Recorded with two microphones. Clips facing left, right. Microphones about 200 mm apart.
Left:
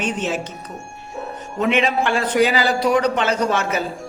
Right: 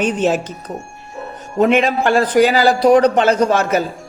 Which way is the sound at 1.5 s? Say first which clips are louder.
Right 5 dB; 45° right (ahead or behind).